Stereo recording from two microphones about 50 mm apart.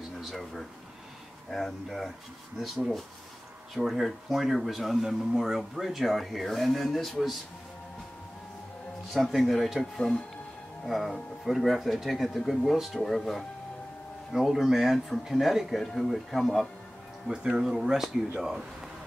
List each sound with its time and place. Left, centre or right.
0.2 s speech: centre
9.3 s speech: centre
17.3 s speech: centre